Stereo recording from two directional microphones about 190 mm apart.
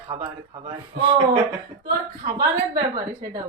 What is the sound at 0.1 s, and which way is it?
Speech, 35° right (ahead or behind).